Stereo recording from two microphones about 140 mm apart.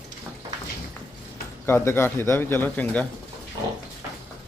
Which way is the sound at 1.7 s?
15° left (ahead or behind).